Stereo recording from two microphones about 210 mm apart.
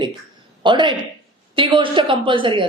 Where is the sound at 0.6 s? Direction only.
20° right (ahead or behind).